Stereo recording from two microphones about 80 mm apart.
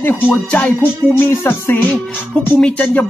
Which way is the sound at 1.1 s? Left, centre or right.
Left.